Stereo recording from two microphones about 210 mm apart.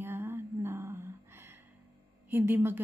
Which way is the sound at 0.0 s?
10° right (ahead or behind).